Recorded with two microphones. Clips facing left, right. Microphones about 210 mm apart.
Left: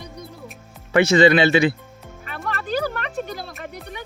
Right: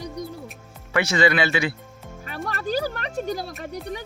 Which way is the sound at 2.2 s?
40° right (ahead or behind).